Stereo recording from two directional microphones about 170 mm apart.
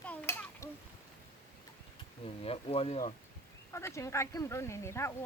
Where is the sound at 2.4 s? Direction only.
35° left (ahead or behind).